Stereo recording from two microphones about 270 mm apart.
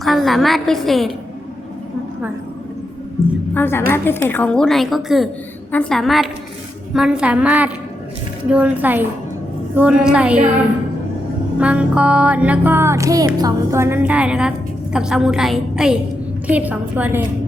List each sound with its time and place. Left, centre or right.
0.0 s music: centre
3.5 s a woman's voice: centre
3.9 s music: centre
11.6 s music: centre
13.4 s a woman's voice: centre
14.9 s music: centre